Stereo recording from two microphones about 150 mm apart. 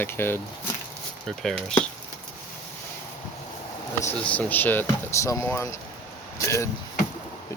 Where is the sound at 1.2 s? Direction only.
5° left (ahead or behind).